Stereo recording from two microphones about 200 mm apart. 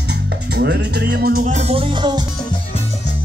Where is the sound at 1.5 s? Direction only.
35° right (ahead or behind).